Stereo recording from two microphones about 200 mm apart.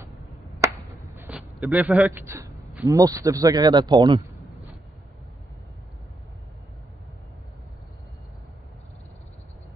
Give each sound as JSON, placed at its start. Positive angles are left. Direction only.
{"t": 0.6, "sound": "chop", "side_deg": -15}
{"t": 1.1, "sound": "a sound", "side_deg": -10}
{"t": 1.5, "sound": "a man's voice", "side_deg": -5}